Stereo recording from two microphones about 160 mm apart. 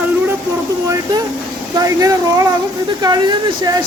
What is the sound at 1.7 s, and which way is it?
Speech, 20° right (ahead or behind).